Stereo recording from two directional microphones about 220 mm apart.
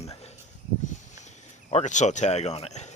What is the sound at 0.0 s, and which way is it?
Snake, 30° left (ahead or behind).